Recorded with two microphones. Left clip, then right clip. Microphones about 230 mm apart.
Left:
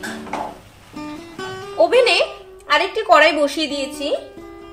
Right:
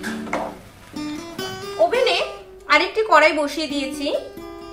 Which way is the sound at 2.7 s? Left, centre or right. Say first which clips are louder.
Left 2 dB; left.